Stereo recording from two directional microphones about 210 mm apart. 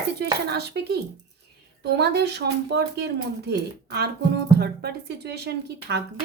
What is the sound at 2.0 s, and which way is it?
Speech, 55° right (ahead or behind).